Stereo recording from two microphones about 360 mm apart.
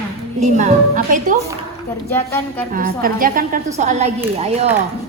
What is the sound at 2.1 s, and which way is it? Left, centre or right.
Speech, centre.